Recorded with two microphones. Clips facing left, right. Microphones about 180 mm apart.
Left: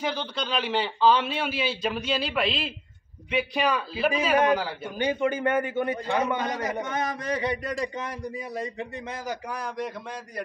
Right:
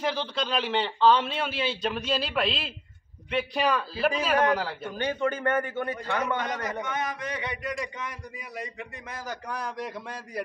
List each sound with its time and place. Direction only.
0.0 s a man's voice: centre (ahead or behind); by 6.2 s 15° left (ahead or behind)
6.8 s speech: 35° left (ahead or behind)
9.5 s a man's voice: centre (ahead or behind)